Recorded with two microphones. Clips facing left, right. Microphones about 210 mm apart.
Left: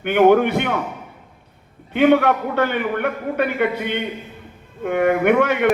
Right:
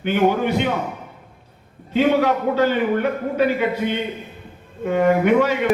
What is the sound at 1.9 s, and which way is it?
A man's voice, 60° left (ahead or behind).